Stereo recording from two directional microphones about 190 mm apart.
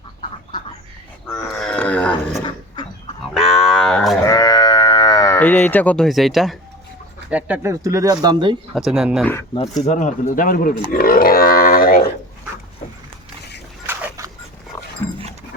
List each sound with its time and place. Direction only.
1.5 s music: 5° left (ahead or behind)
3.3 s a sound: centre (ahead or behind)
4.2 s sheep: 20° left (ahead or behind)
5.4 s speech: 10° left (ahead or behind); by 8.5 s 25° right (ahead or behind)
8.7 s speech: centre (ahead or behind)
9.8 s speech: 40° left (ahead or behind)
10.9 s grunt: 50° left (ahead or behind)
13.8 s dog: 15° right (ahead or behind)